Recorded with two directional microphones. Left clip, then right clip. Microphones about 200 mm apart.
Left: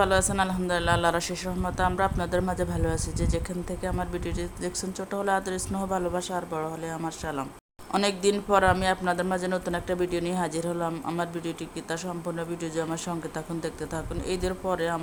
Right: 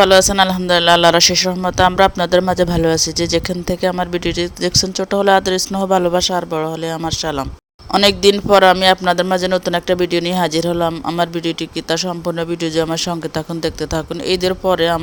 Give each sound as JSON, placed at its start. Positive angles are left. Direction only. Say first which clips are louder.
{"t": 0.0, "sound": "a man's voice", "louder": "right 13 dB", "side_deg": -40}